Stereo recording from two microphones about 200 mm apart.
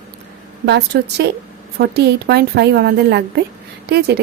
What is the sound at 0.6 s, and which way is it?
A woman's voice, 55° right (ahead or behind).